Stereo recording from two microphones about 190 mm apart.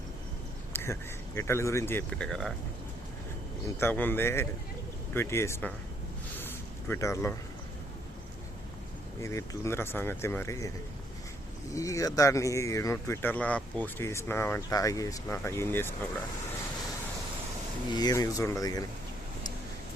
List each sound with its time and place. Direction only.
0.7 s a sound: 10° left (ahead or behind)
1.4 s speech: 15° left (ahead or behind)
3.8 s speech: 10° left (ahead or behind)
6.8 s speech: 15° left (ahead or behind)
9.2 s speech: 15° left (ahead or behind)
11.7 s speech: 15° left (ahead or behind)
17.9 s speech: 20° left (ahead or behind)